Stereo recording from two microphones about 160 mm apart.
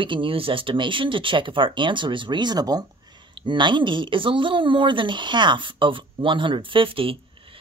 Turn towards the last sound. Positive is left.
turn(degrees=-35)  # may be behind; listen again after turning